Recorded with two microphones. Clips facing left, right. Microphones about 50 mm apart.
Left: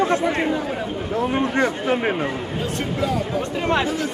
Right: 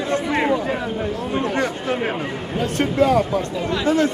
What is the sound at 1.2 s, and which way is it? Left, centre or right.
Speech, left.